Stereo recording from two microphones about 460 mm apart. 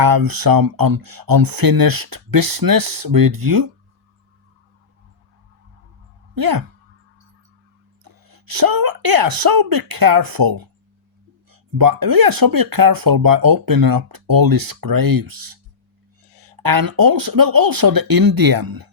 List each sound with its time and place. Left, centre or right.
0.0 s speech: right
6.3 s speech: right
8.0 s speech: right